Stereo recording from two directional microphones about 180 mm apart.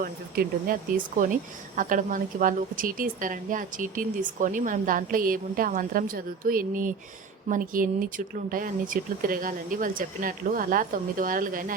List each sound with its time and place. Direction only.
0.0 s speech: 50° right (ahead or behind)